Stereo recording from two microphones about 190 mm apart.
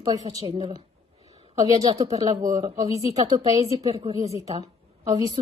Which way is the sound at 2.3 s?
40° right (ahead or behind).